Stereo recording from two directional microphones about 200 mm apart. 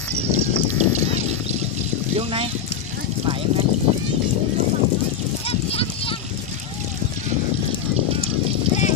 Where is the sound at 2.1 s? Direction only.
30° right (ahead or behind).